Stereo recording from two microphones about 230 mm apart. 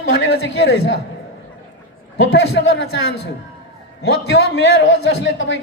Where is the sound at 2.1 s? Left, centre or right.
Left.